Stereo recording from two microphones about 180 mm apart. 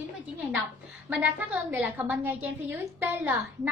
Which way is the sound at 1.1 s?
10° right (ahead or behind).